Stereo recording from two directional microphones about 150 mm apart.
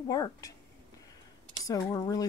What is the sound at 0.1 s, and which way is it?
Speech, 25° left (ahead or behind).